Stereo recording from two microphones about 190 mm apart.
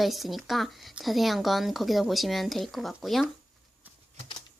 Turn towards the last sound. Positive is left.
turn(degrees=0)  # may be behind; listen again after turning